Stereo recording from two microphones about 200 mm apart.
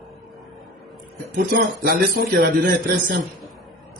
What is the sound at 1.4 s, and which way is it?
A man's voice, 45° right (ahead or behind).